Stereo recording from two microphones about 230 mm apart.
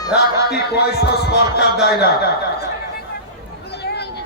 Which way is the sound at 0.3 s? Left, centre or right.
Left.